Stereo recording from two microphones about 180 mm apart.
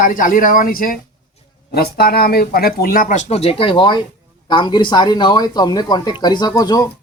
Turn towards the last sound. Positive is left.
turn(degrees=20)  # may be behind; listen again after turning